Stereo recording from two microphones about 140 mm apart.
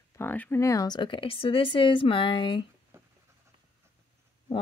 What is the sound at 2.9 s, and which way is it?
Writing, 20° right (ahead or behind).